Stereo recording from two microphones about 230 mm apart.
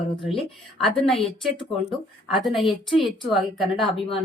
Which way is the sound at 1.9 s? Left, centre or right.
Centre.